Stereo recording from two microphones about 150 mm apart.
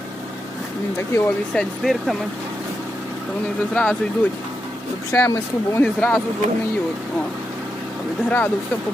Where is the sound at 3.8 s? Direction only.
10° left (ahead or behind).